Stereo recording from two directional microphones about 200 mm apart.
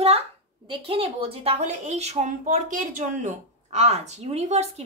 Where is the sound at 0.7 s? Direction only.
30° right (ahead or behind).